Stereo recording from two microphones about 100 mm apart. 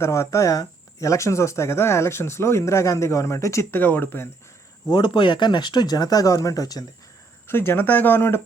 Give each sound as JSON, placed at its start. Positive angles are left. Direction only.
{"t": 0.0, "sound": "speech", "side_deg": 30}
{"t": 4.9, "sound": "speech", "side_deg": 50}
{"t": 7.4, "sound": "speech", "side_deg": 25}